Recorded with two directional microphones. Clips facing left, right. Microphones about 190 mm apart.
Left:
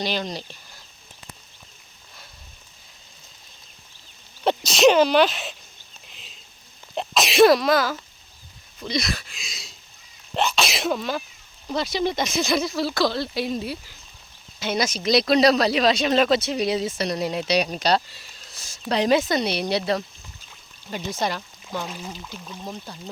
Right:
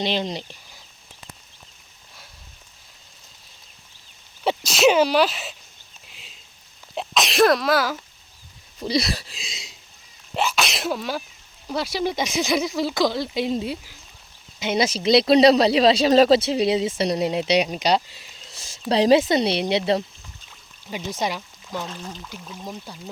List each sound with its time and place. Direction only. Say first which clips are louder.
0.0 s speech: right 2 dB; 25° right (ahead or behind)
4.4 s speech: left 1 dB; 5° right (ahead or behind)
6.1 s a sound: even; 5° right (ahead or behind)
6.9 s speech: left 2 dB; centre (ahead or behind)
8.8 s speech: right 4 dB; 35° right (ahead or behind)
10.3 s speech: even; 5° right (ahead or behind)
14.8 s speech: right 4 dB; 30° right (ahead or behind)
20.8 s speech: even; 15° right (ahead or behind)
21.8 s speech: even; 10° left (ahead or behind)
22.3 s speech: even; 10° right (ahead or behind)